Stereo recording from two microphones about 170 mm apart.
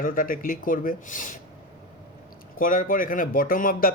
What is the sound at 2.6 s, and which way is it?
Speech, 55° left (ahead or behind).